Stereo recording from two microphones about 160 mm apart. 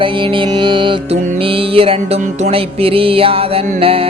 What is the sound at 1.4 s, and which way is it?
Music, 35° right (ahead or behind).